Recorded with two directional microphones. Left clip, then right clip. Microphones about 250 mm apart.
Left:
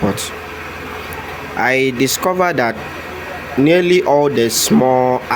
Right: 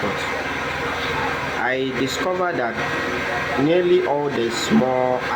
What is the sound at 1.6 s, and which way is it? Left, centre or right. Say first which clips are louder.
Speech: left 11 dB; left.